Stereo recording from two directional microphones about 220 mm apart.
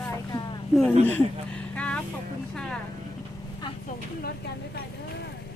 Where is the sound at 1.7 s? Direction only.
5° left (ahead or behind).